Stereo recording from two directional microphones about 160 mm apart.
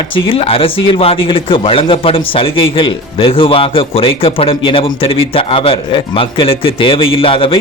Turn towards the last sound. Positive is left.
turn(degrees=35)  # may be behind; listen again after turning